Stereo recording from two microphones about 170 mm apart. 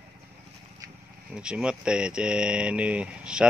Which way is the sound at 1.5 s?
5° right (ahead or behind).